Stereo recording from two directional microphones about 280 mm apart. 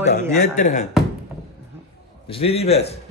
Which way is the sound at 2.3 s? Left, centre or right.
Left.